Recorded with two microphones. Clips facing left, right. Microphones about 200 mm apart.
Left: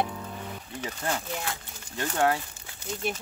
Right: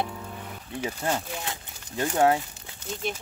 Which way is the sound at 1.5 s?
20° right (ahead or behind).